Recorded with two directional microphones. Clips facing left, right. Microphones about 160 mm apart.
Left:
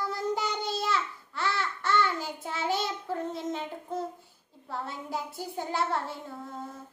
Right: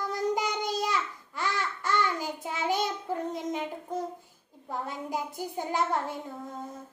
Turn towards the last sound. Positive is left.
turn(degrees=-15)  # may be behind; listen again after turning